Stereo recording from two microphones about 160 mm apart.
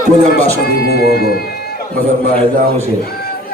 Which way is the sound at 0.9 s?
80° left.